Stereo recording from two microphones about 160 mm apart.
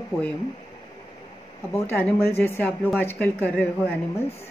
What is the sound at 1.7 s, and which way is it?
Speech, 15° left (ahead or behind).